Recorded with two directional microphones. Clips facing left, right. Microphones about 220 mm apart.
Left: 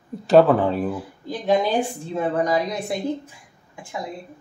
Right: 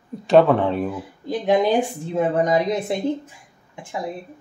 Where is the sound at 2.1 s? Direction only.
20° right (ahead or behind).